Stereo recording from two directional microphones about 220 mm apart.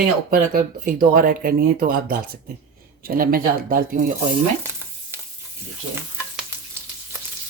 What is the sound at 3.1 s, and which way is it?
Speech, 40° right (ahead or behind).